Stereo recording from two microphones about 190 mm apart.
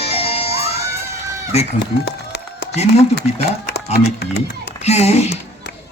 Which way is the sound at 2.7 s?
35° left (ahead or behind).